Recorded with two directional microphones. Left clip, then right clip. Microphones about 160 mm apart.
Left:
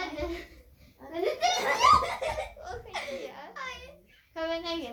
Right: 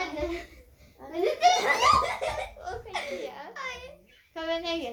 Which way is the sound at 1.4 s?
5° left (ahead or behind).